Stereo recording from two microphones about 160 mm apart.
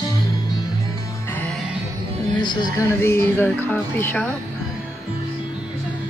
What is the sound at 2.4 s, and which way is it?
Speech, 30° left (ahead or behind).